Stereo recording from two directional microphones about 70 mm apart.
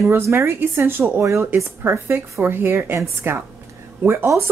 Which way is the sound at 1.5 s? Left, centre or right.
Right.